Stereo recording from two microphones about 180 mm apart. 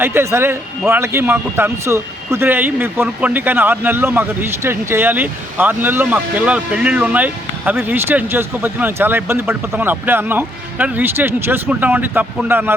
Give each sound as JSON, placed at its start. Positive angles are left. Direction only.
{"t": 0.0, "sound": "a man's voice", "side_deg": -15}